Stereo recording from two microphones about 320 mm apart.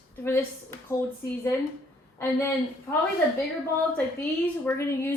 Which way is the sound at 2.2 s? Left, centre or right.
Centre.